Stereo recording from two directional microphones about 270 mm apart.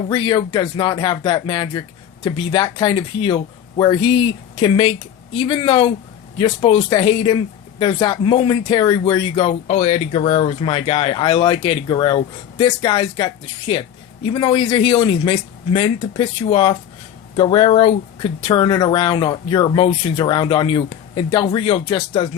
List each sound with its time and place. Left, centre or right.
0.1 s speech: centre